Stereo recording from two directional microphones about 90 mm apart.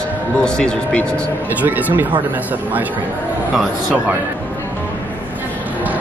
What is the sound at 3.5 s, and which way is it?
Speech, 5° right (ahead or behind).